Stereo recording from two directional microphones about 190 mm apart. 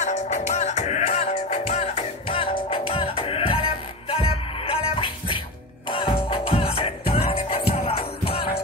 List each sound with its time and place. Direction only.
0.0 s music: 40° left (ahead or behind)